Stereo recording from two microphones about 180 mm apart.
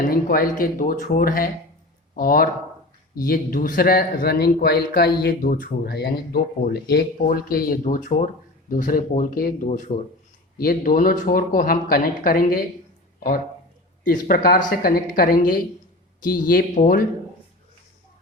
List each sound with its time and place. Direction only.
0.1 s speech: 50° left (ahead or behind)